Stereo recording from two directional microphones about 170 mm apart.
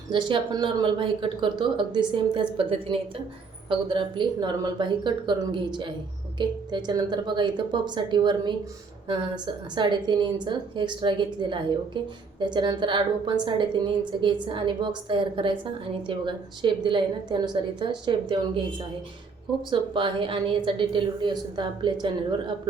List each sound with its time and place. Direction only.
0.1 s a woman's voice: 30° right (ahead or behind)
19.7 s a woman's voice: 30° right (ahead or behind)